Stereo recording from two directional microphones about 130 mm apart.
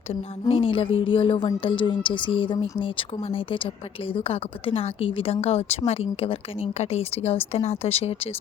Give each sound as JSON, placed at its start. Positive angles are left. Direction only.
{"t": 0.1, "sound": "a woman's voice", "side_deg": 45}